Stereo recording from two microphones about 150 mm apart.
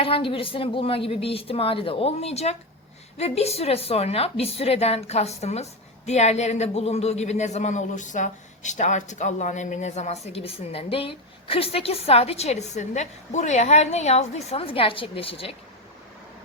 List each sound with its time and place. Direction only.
0.0 s a woman's voice: 35° left (ahead or behind)